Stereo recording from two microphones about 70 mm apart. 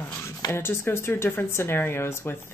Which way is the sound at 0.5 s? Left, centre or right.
Left.